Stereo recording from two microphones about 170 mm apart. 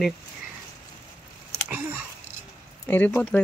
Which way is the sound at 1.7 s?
10° right (ahead or behind).